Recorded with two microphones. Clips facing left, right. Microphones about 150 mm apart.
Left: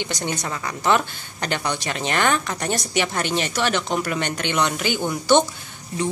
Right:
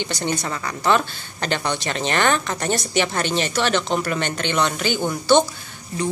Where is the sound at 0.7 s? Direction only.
15° left (ahead or behind).